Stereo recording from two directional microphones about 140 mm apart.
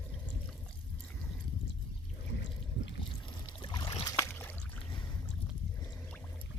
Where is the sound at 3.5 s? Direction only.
35° left (ahead or behind).